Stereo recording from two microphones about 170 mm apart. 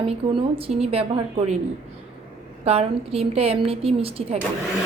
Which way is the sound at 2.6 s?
35° right (ahead or behind).